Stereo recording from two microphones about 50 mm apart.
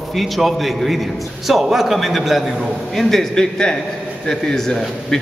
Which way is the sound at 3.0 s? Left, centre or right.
Centre.